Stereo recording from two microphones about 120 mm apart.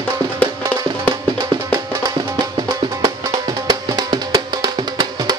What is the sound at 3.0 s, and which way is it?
Music, 35° right (ahead or behind).